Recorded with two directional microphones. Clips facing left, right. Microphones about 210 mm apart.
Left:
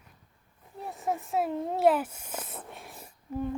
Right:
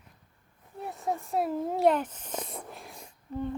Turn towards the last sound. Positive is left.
turn(degrees=5)  # may be behind; listen again after turning